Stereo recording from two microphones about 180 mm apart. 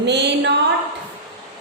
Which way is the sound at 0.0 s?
70° right (ahead or behind).